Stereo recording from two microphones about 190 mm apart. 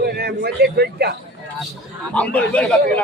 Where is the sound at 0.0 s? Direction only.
55° right (ahead or behind).